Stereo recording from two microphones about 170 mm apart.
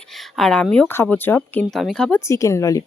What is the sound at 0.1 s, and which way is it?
Speech, centre (ahead or behind).